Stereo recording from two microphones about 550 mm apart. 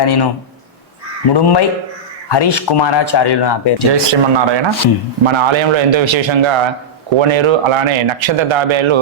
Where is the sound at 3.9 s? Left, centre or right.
Right.